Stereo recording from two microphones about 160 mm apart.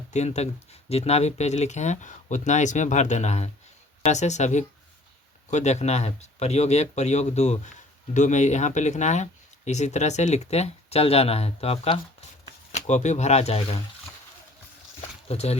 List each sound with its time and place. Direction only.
0.1 s speech: 45° left (ahead or behind)
15.3 s speech: 40° left (ahead or behind)